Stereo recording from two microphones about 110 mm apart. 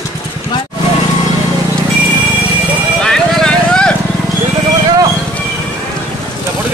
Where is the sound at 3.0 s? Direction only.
5° left (ahead or behind).